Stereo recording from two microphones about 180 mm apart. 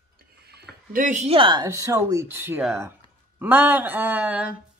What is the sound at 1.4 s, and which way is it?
Speech, 25° right (ahead or behind).